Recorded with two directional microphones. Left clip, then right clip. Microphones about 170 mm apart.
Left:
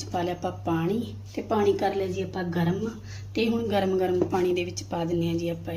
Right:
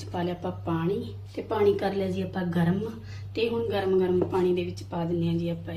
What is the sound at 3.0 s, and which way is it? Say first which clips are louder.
Speech: even; 30° left (ahead or behind).